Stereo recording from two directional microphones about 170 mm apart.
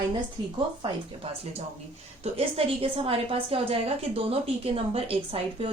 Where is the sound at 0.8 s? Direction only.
35° right (ahead or behind).